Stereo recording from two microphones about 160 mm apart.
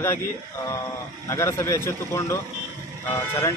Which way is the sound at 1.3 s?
15° left (ahead or behind).